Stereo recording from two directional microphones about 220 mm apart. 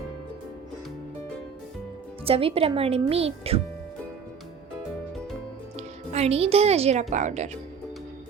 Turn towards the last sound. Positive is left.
turn(degrees=-30)  # may be behind; listen again after turning